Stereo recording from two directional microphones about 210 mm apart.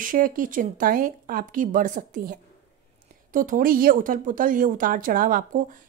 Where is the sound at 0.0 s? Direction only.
40° right (ahead or behind).